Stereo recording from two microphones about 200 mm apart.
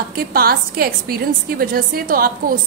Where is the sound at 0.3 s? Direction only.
50° right (ahead or behind).